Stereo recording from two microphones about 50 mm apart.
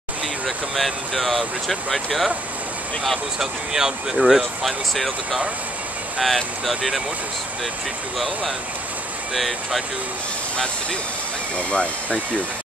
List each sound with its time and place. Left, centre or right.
0.7 s speech: centre
3.3 s speech: centre
9.3 s speech: centre
11.5 s speech: left